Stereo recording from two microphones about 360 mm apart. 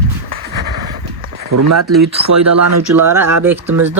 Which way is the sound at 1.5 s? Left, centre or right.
Right.